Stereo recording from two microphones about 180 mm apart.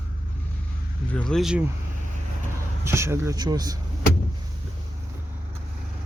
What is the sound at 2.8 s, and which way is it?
Speech, 15° right (ahead or behind).